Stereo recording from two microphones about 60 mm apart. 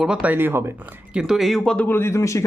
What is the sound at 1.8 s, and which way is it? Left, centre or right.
Speech, left.